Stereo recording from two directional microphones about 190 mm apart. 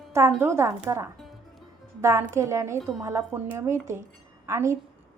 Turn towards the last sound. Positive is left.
turn(degrees=-15)  # may be behind; listen again after turning